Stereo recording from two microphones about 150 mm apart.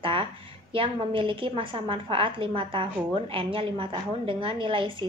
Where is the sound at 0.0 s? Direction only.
35° right (ahead or behind).